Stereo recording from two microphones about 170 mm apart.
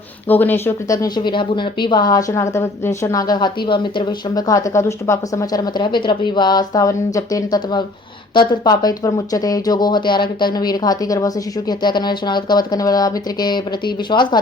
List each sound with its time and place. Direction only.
0.3 s speech: 10° left (ahead or behind); by 14.3 s 25° left (ahead or behind)